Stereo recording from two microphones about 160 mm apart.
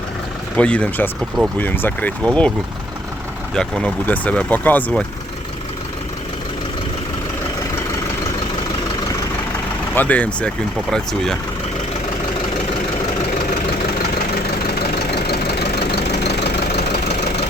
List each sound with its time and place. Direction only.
0.5 s speech: 5° left (ahead or behind)
3.5 s speech: 5° left (ahead or behind)
9.9 s speech: 10° left (ahead or behind)
15.3 s engine knocking: 90° left